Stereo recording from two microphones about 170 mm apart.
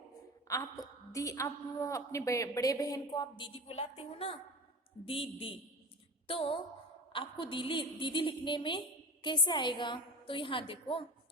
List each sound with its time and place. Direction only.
0.4 s a woman's voice: 20° left (ahead or behind)